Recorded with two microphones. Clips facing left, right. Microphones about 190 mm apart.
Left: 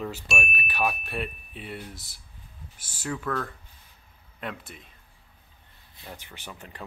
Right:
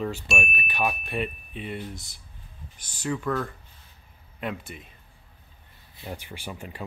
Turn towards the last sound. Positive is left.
turn(degrees=-10)  # may be behind; listen again after turning